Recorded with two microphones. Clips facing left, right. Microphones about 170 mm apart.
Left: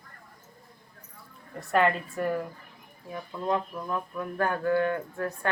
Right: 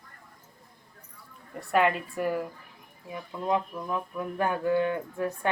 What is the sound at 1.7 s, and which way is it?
Speech, 5° right (ahead or behind).